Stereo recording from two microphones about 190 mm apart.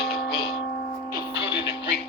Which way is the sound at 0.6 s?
55° left (ahead or behind).